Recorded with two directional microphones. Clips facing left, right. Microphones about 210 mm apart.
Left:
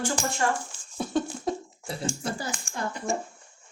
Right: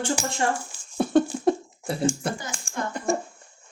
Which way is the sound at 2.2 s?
60° right (ahead or behind).